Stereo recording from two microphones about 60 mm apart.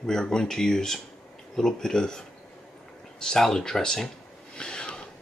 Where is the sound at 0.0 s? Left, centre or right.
Centre.